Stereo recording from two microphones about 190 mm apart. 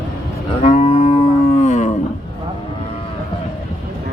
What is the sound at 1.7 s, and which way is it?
Roaring cats, 40° left (ahead or behind).